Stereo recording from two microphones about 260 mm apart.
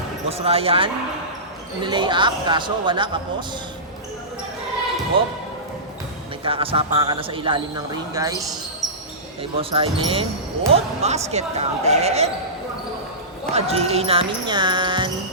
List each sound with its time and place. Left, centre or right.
0.3 s speech: right
5.1 s speech: right
6.4 s speech: right
8.8 s basketball bounce: centre
9.4 s speech: right
13.5 s speech: right